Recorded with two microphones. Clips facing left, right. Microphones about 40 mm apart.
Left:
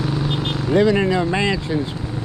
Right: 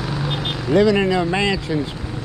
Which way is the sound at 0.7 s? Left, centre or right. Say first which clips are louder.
Right 1 dB; right.